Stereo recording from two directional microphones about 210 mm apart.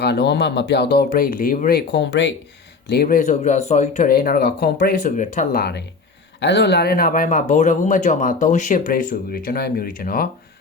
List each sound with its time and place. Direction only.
0.0 s speech: 50° left (ahead or behind)
2.9 s speech: 45° left (ahead or behind)